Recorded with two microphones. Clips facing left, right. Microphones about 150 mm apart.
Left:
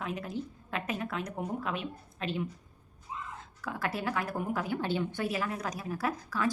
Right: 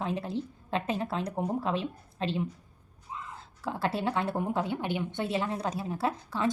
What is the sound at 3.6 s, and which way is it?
A woman's voice, 30° right (ahead or behind).